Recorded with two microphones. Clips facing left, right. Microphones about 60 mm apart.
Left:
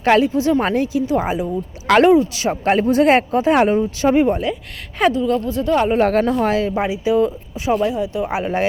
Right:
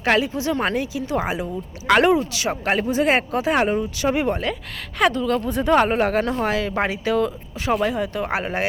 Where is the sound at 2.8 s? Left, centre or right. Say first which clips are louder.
Left 6 dB; left.